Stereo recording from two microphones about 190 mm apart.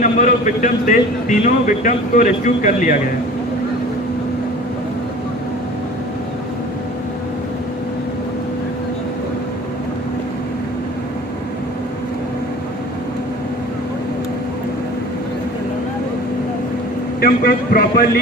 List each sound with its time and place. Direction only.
0.0 s a man's voice: 40° left (ahead or behind)
17.2 s a man's voice: 50° left (ahead or behind)